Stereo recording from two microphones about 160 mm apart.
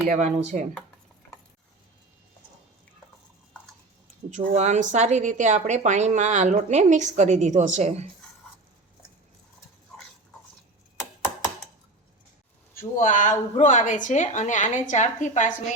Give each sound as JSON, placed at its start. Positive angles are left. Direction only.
{"t": 0.1, "sound": "a woman's voice", "side_deg": -50}
{"t": 4.3, "sound": "a woman's voice", "side_deg": -50}
{"t": 12.7, "sound": "a woman's voice", "side_deg": 55}